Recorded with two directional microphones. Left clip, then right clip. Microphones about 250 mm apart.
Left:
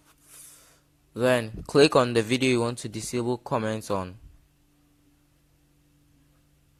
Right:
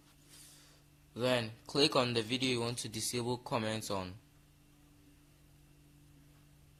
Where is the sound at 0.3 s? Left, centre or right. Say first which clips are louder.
Left 6 dB; left.